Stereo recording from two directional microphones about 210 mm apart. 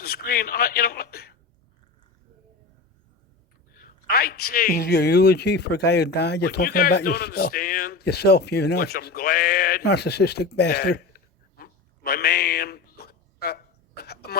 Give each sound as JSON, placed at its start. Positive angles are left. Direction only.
{"t": 0.0, "sound": "a man's voice", "side_deg": 45}
{"t": 3.8, "sound": "a man's voice", "side_deg": 45}